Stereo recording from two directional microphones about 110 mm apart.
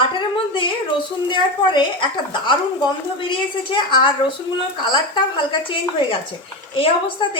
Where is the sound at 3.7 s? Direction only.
50° left (ahead or behind).